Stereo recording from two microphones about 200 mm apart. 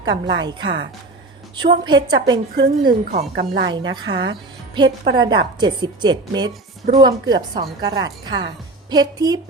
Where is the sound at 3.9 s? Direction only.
25° right (ahead or behind).